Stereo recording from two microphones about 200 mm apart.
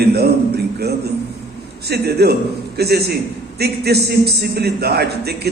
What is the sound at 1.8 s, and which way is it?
A man's voice, 55° right (ahead or behind).